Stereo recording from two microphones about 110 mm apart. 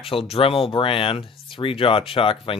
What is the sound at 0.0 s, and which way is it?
Speech, 60° left (ahead or behind).